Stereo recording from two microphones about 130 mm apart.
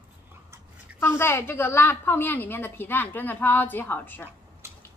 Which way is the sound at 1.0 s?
20° left (ahead or behind).